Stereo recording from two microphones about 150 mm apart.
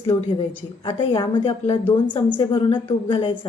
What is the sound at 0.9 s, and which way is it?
A woman's voice, 35° left (ahead or behind).